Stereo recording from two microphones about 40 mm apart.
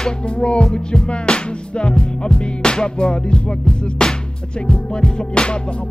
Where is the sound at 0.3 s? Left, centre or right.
Left.